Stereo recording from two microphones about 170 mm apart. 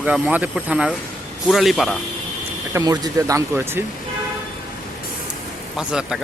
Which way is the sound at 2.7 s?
20° right (ahead or behind).